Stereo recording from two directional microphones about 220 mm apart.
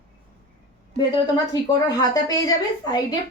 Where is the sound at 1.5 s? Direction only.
15° left (ahead or behind).